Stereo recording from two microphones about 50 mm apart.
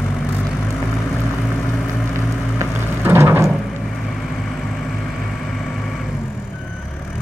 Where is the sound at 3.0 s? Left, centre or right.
Right.